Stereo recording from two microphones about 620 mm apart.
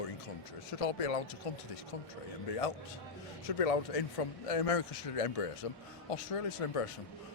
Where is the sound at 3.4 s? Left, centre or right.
Left.